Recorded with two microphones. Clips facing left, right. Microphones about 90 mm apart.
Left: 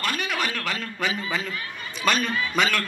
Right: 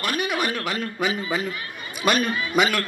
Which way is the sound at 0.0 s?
15° right (ahead or behind).